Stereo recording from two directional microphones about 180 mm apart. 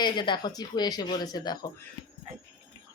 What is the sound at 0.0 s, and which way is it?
Speech, 25° left (ahead or behind).